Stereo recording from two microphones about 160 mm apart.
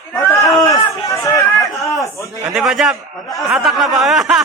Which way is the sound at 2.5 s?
Centre (ahead or behind).